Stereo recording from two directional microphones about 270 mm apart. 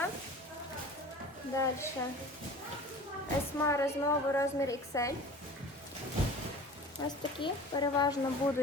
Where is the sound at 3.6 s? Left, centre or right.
Centre.